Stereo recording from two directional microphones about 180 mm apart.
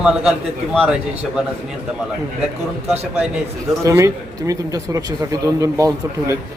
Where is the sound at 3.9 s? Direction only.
15° right (ahead or behind).